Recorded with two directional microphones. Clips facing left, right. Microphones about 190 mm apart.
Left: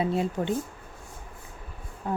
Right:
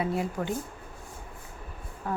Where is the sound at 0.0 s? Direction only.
25° left (ahead or behind).